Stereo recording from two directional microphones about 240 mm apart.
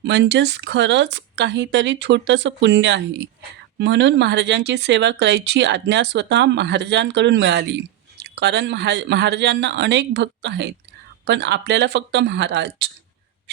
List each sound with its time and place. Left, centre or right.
0.0 s speech: right